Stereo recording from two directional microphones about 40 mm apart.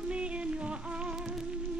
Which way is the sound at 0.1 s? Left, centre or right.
Right.